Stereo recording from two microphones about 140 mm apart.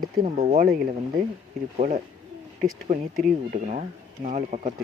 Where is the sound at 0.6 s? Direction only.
75° right (ahead or behind).